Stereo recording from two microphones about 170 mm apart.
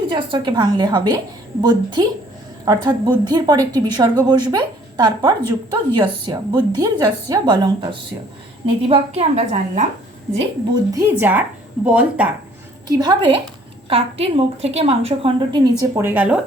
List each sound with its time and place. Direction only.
0.1 s speech: 30° right (ahead or behind)
8.9 s a woman's voice: 35° right (ahead or behind)
10.7 s speech: 15° right (ahead or behind)
12.9 s a woman's voice: 25° right (ahead or behind)
16.0 s speech: 10° right (ahead or behind)